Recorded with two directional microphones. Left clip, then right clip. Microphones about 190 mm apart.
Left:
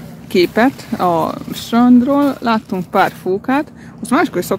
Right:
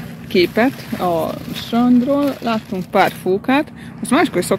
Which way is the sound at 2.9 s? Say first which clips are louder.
Even; 5° left (ahead or behind).